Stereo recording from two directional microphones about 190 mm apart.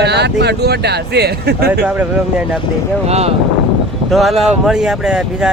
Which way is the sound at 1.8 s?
10° right (ahead or behind).